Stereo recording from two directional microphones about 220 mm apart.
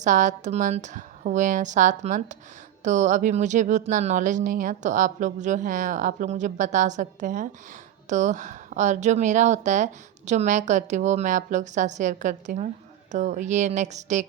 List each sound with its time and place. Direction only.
0.0 s speech: 35° right (ahead or behind)